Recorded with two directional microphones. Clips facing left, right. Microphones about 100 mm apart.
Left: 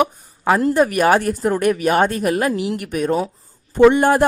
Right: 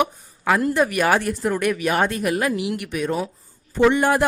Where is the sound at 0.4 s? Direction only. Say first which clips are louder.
Left 4 dB; 35° left (ahead or behind).